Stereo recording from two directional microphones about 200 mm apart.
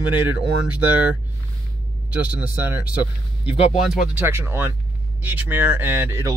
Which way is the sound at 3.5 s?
30° left (ahead or behind).